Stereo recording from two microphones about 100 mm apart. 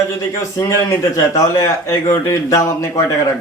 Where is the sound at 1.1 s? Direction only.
35° left (ahead or behind).